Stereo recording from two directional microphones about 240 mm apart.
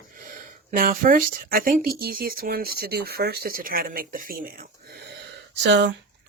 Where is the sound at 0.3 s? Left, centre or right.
Right.